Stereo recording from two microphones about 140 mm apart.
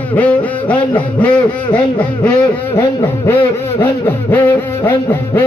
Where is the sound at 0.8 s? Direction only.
35° left (ahead or behind).